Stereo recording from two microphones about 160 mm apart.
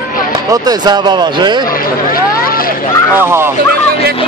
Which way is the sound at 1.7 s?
65° left (ahead or behind).